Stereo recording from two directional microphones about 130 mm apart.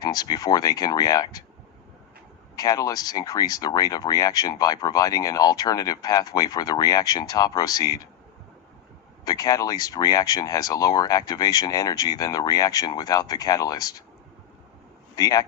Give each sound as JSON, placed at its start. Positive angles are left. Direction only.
{"t": 0.0, "sound": "speech", "side_deg": 30}
{"t": 2.6, "sound": "speech", "side_deg": 30}
{"t": 9.2, "sound": "speech", "side_deg": 30}
{"t": 15.1, "sound": "a man's voice", "side_deg": 30}